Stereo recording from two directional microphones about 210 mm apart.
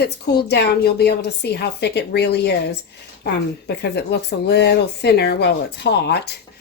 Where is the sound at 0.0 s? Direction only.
50° left (ahead or behind).